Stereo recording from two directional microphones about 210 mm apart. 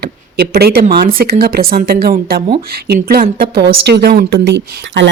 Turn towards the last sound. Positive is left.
turn(degrees=-55)  # may be behind; listen again after turning